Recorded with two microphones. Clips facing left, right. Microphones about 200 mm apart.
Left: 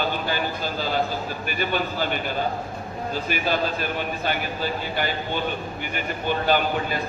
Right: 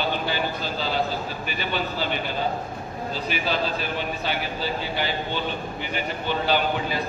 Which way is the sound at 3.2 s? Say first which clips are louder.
Left 1 dB; 50° left (ahead or behind).